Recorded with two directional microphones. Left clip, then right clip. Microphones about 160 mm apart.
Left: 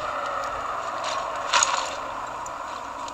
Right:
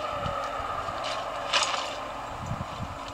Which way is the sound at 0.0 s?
40° left (ahead or behind).